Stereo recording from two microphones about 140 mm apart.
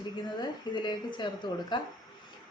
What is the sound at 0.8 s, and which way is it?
A woman's voice, 30° left (ahead or behind).